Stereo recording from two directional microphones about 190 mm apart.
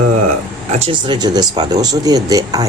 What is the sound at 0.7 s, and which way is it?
Speech, 30° right (ahead or behind).